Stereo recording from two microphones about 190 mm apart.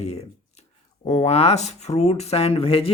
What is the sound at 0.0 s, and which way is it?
Speech, 35° left (ahead or behind).